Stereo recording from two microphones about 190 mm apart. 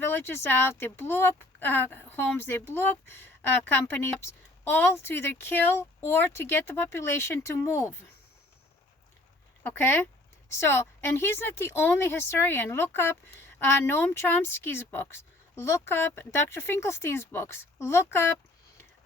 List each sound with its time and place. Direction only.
0.0 s speech: 10° left (ahead or behind)
9.6 s speech: 10° left (ahead or behind)